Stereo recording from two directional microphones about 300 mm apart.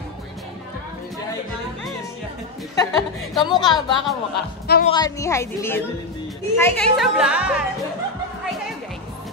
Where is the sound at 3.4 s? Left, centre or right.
Centre.